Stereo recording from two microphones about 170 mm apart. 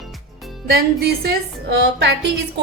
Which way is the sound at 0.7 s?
65° right (ahead or behind).